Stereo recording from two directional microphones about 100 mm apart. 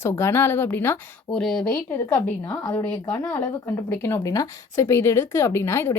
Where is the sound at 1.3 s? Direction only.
5° left (ahead or behind).